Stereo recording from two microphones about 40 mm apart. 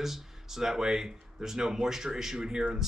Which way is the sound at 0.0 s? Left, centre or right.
Centre.